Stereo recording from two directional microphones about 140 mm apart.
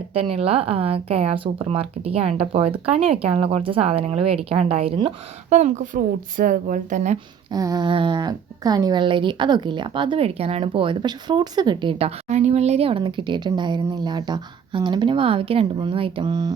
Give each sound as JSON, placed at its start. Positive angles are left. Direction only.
{"t": 0.1, "sound": "speech", "side_deg": -45}
{"t": 5.5, "sound": "a woman's voice", "side_deg": -55}
{"t": 7.5, "sound": "speech", "side_deg": -30}